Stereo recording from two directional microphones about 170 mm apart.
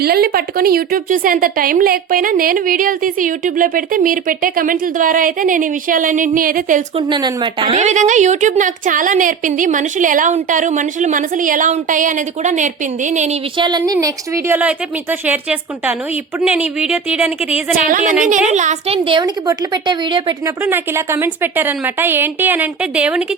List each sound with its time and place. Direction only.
0.0 s a woman's voice: 65° right (ahead or behind)
7.1 s a woman's voice: 30° right (ahead or behind)
7.8 s a woman's voice: 45° right (ahead or behind)
13.6 s a woman's voice: 25° right (ahead or behind); by 17.6 s 5° right (ahead or behind)
17.8 s a woman's voice: 50° right (ahead or behind); by 20.3 s 25° right (ahead or behind)
20.7 s speech: 15° right (ahead or behind)